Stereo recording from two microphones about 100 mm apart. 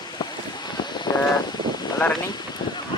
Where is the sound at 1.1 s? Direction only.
45° left (ahead or behind).